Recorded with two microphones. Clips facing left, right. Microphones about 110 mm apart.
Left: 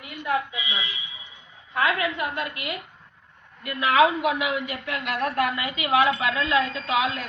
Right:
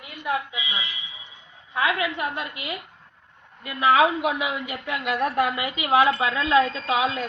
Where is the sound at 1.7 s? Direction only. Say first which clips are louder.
Even; 20° right (ahead or behind).